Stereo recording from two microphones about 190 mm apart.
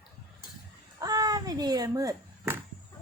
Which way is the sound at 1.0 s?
20° right (ahead or behind).